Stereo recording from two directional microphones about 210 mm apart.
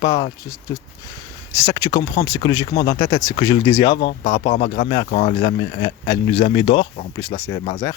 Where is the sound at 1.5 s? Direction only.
15° left (ahead or behind).